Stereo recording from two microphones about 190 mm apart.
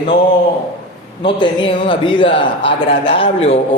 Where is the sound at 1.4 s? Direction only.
25° left (ahead or behind).